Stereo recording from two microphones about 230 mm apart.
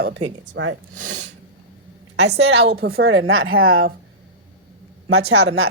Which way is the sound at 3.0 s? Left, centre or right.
Right.